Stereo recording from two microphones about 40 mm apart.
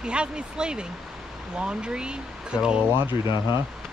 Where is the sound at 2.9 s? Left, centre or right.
Right.